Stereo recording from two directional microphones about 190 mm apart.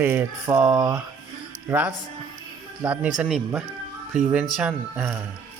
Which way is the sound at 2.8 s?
5° right (ahead or behind).